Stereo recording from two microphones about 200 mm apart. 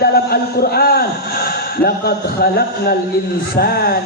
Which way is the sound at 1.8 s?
50° left (ahead or behind).